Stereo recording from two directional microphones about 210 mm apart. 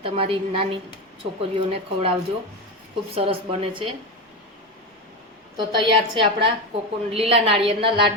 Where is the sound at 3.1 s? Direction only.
25° right (ahead or behind).